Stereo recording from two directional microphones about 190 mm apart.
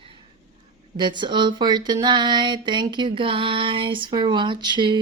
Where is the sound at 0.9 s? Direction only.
25° right (ahead or behind).